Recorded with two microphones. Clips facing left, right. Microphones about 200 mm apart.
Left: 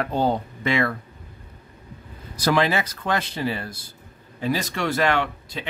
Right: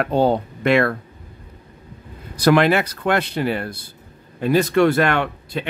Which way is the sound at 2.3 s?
65° right (ahead or behind).